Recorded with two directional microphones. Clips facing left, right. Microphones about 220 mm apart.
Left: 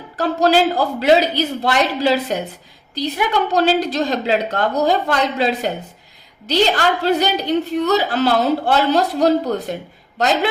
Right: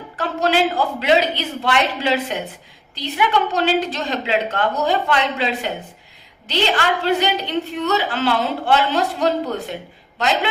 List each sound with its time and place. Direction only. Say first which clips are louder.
0.2 s a woman's voice: left 4 dB; 40° left (ahead or behind)